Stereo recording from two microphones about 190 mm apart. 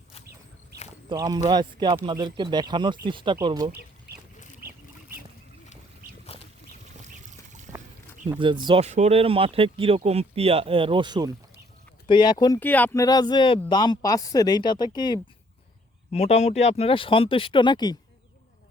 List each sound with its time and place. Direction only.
1.1 s speech: 20° right (ahead or behind)
4.6 s duck: 55° right (ahead or behind)
6.3 s boat: 30° left (ahead or behind)
7.7 s a sound: 15° right (ahead or behind)
8.3 s speech: 25° right (ahead or behind)
12.0 s speech: 25° left (ahead or behind)
12.5 s speech: 10° left (ahead or behind)
16.1 s speech: 35° left (ahead or behind)